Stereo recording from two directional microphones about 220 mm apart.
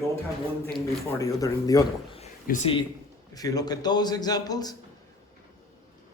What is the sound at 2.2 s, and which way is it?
Speech, 30° left (ahead or behind).